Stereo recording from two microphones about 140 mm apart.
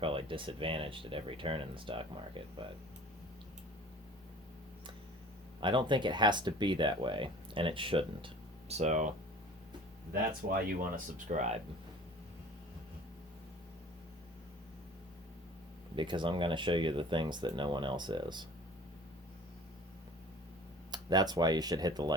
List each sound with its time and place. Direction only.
0.0 s speech: 40° right (ahead or behind)
5.5 s speech: 35° right (ahead or behind)
8.7 s speech: 55° right (ahead or behind)
10.5 s speech: 85° right; by 11.6 s 55° right (ahead or behind)
16.0 s speech: 35° right (ahead or behind)
20.9 s speech: 30° right (ahead or behind)